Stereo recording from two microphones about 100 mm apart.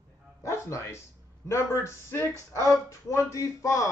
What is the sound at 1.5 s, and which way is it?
A man's voice, 30° left (ahead or behind).